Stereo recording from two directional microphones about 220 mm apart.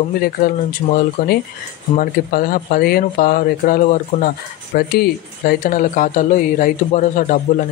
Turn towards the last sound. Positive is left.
turn(degrees=35)  # may be behind; listen again after turning